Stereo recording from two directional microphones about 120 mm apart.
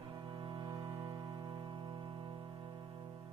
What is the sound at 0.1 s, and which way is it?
Music, 40° right (ahead or behind).